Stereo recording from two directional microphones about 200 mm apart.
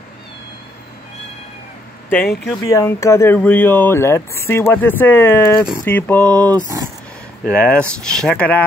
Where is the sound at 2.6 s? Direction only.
15° left (ahead or behind).